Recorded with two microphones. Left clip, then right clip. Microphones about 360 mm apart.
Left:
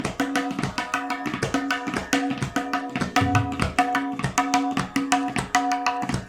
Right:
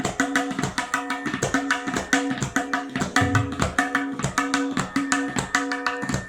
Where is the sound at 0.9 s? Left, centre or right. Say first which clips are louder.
Right 1 dB; centre.